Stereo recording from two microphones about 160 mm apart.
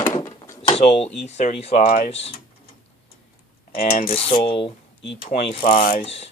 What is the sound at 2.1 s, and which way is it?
Speech, 40° left (ahead or behind).